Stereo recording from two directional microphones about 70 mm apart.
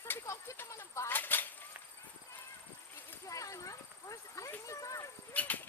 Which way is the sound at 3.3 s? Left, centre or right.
Left.